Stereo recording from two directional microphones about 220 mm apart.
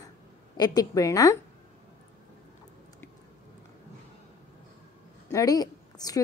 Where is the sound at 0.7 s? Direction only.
15° left (ahead or behind).